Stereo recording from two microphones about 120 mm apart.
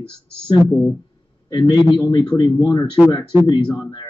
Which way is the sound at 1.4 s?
35° left (ahead or behind).